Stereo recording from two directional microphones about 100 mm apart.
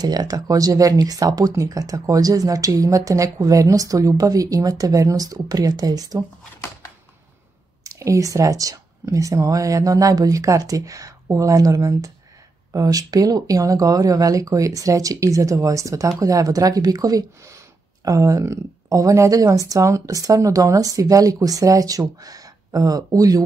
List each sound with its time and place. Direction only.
0.0 s speech: 40° right (ahead or behind)
7.8 s speech: 35° right (ahead or behind)